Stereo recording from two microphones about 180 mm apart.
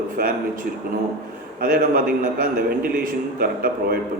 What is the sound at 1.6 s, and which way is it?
A man's voice, 50° right (ahead or behind).